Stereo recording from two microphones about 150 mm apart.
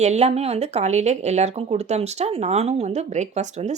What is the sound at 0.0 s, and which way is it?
Speech, 50° right (ahead or behind).